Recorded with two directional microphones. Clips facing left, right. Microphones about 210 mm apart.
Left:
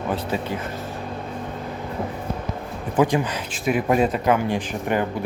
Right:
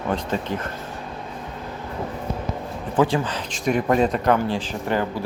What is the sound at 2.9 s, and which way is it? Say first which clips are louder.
Speech: left 1 dB; 15° left (ahead or behind).